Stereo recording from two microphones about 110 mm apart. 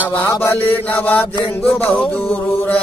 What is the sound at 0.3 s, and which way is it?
Mantra, 20° left (ahead or behind).